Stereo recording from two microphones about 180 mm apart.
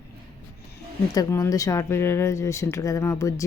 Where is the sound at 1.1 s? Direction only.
20° left (ahead or behind).